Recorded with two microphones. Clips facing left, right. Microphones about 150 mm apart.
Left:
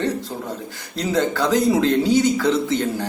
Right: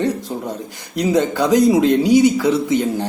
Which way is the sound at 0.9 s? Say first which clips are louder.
Right 4 dB; 15° right (ahead or behind).